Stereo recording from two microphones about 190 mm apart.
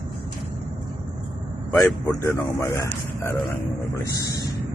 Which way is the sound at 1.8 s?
15° left (ahead or behind).